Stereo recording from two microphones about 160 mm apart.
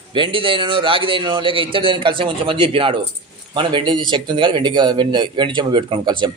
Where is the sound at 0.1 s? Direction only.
30° right (ahead or behind).